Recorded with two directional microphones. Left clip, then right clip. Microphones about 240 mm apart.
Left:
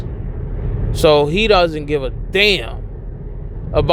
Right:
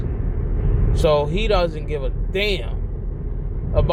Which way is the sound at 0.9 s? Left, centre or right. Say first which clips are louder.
Left 6 dB; left.